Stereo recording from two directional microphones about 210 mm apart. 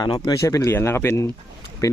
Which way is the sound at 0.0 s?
20° left (ahead or behind).